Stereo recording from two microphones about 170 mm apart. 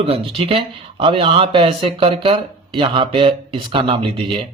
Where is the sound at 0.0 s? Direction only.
30° right (ahead or behind).